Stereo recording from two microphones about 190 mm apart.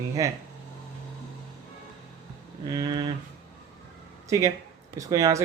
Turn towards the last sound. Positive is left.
turn(degrees=-20)  # may be behind; listen again after turning